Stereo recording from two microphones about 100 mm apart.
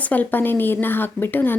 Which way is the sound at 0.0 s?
15° left (ahead or behind).